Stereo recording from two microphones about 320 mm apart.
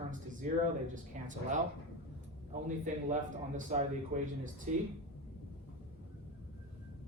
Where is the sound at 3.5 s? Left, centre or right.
Right.